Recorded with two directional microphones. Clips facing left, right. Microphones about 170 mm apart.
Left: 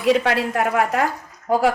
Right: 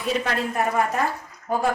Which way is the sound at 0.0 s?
90° left.